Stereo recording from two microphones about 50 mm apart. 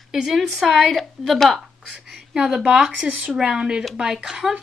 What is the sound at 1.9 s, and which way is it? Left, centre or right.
A woman's voice, centre.